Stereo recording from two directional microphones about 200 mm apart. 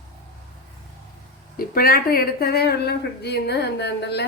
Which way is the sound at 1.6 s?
45° left (ahead or behind).